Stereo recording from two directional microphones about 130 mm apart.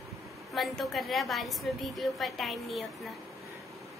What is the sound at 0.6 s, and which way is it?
A woman's voice, centre (ahead or behind).